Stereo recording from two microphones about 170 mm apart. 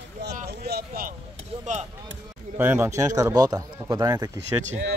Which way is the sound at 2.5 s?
10° right (ahead or behind).